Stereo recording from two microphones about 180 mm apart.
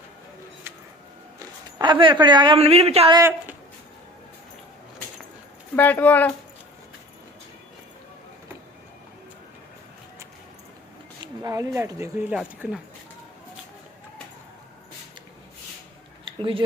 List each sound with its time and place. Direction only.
1.8 s a man's voice: 25° right (ahead or behind)
3.2 s speech: 15° right (ahead or behind)
5.7 s speech: 10° left (ahead or behind)
11.2 s speech: 20° right (ahead or behind)
16.2 s a sound: 30° right (ahead or behind)